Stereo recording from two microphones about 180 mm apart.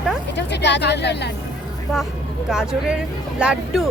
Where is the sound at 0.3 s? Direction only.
75° left (ahead or behind).